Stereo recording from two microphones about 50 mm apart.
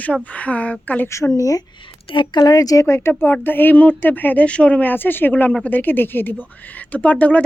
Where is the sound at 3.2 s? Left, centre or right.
Left.